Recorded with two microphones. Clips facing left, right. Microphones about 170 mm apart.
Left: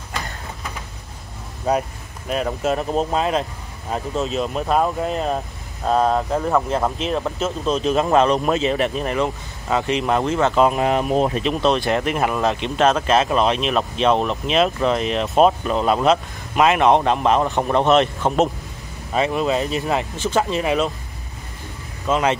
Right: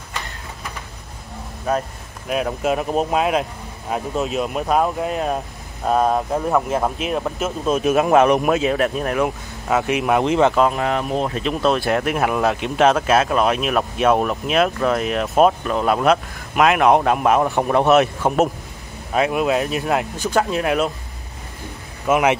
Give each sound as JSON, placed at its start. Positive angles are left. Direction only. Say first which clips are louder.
{"t": 1.7, "sound": "speech", "louder": "left 1 dB", "side_deg": 20}
{"t": 2.2, "sound": "speech", "louder": "right 1 dB", "side_deg": -5}
{"t": 8.5, "sound": "speech", "louder": "right 1 dB", "side_deg": 0}
{"t": 10.6, "sound": "speech", "louder": "left 1 dB", "side_deg": 15}
{"t": 11.4, "sound": "speech", "louder": "even", "side_deg": -5}
{"t": 22.0, "sound": "speech", "louder": "right 2 dB", "side_deg": -10}